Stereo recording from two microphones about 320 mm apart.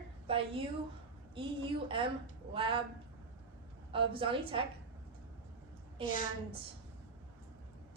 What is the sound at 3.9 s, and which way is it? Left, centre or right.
Speech, centre.